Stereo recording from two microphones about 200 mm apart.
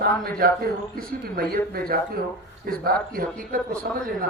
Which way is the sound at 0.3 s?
50° right (ahead or behind).